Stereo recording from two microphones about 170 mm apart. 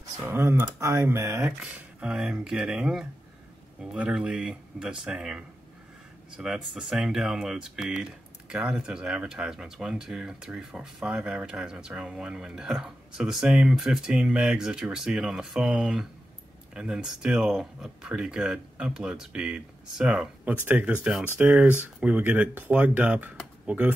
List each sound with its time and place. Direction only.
0.2 s speech: 15° right (ahead or behind)